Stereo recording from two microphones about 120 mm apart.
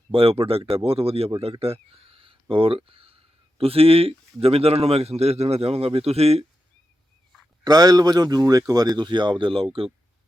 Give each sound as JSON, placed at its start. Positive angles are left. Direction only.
{"t": 0.1, "sound": "a man's voice", "side_deg": -55}
{"t": 7.6, "sound": "speech", "side_deg": -35}